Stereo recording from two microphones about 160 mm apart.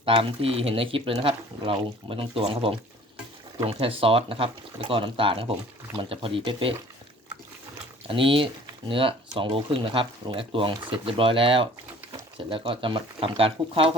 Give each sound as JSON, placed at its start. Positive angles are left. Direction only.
{"t": 0.0, "sound": "speech", "side_deg": -35}
{"t": 8.0, "sound": "speech", "side_deg": -35}